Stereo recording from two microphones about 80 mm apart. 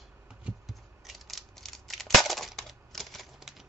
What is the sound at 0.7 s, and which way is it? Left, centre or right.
Scissors, centre.